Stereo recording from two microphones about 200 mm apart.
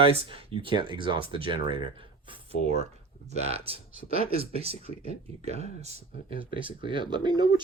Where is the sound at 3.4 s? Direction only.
30° right (ahead or behind).